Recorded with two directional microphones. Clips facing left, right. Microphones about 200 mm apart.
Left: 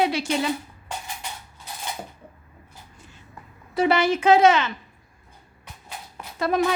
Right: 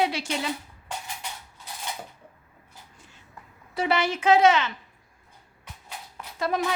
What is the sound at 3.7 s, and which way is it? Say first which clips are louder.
Speech: left 5 dB; 45° left (ahead or behind).